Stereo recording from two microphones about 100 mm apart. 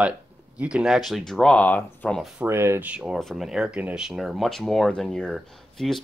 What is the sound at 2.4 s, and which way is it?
Speech, 25° right (ahead or behind).